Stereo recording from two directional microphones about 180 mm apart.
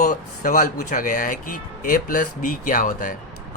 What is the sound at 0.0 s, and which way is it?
Speech, 45° left (ahead or behind).